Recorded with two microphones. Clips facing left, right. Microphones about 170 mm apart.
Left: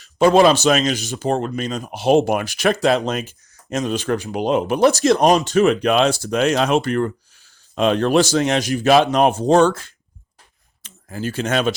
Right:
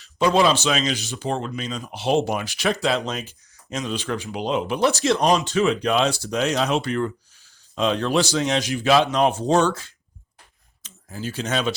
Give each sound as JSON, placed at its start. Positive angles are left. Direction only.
{"t": 0.2, "sound": "speech", "side_deg": 50}